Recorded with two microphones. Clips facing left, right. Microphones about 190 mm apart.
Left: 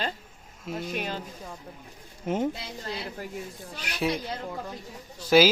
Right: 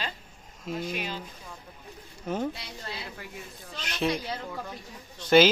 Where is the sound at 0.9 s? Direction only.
45° left (ahead or behind).